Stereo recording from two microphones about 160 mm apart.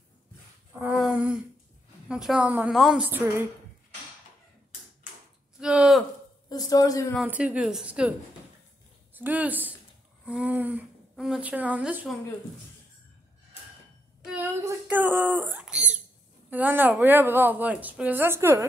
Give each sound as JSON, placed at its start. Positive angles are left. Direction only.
{"t": 0.9, "sound": "humming", "side_deg": -5}
{"t": 2.0, "sound": "a woman's voice", "side_deg": -5}
{"t": 5.6, "sound": "a sound", "side_deg": -5}
{"t": 6.5, "sound": "a woman's voice", "side_deg": 25}
{"t": 7.2, "sound": "a woman's voice", "side_deg": -10}
{"t": 9.1, "sound": "a woman's voice", "side_deg": -10}
{"t": 14.2, "sound": "a sound", "side_deg": -10}
{"t": 16.4, "sound": "a woman's voice", "side_deg": -10}